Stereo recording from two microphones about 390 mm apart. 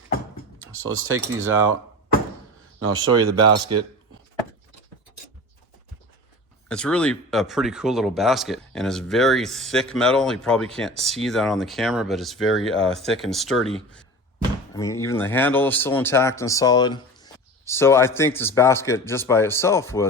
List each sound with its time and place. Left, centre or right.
0.6 s speech: right
2.8 s speech: right
6.7 s speech: centre
14.8 s speech: centre